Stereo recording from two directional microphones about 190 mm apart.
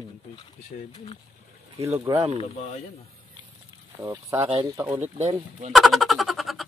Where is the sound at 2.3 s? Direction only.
35° left (ahead or behind).